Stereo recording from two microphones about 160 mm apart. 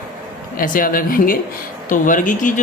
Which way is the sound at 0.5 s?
60° left (ahead or behind).